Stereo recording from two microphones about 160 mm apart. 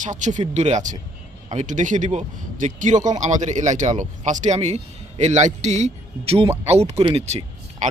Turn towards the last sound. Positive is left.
turn(degrees=-45)  # may be behind; listen again after turning